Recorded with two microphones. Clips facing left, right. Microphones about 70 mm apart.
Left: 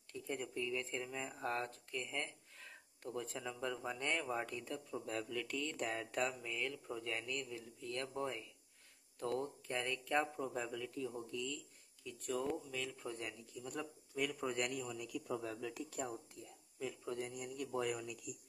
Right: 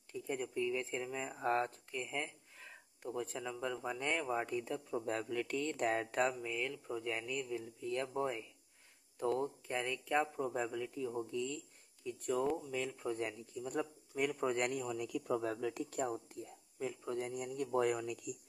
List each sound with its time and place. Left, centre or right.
0.1 s speech: centre
1.4 s speech: right
2.0 s speech: centre
4.9 s speech: right
6.4 s speech: centre
10.6 s speech: centre
12.4 s speech: centre
12.7 s speech: right
17.6 s speech: right